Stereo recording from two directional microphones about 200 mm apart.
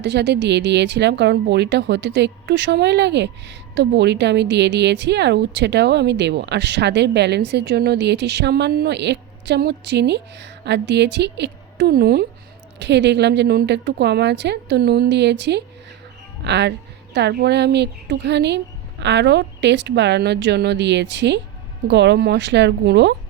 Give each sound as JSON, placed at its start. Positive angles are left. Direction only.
{"t": 0.0, "sound": "a woman's voice", "side_deg": -60}